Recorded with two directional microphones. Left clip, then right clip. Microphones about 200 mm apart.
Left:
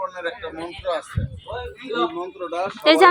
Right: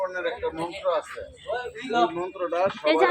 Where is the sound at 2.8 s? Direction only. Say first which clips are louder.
Left 9 dB; 50° left (ahead or behind).